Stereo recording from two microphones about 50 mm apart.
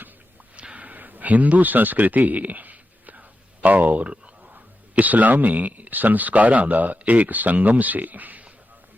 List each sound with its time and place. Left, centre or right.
0.5 s speech: right